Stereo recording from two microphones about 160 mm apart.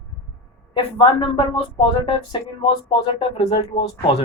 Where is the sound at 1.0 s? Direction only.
35° left (ahead or behind).